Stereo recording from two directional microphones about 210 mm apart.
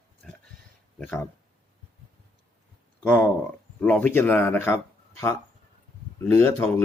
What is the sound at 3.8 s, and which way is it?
Speech, 5° left (ahead or behind).